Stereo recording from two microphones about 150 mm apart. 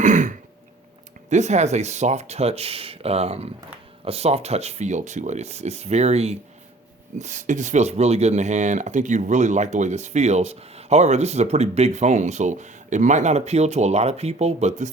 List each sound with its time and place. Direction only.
0.0 s throat clearing: 55° right (ahead or behind)
1.3 s speech: 50° right (ahead or behind)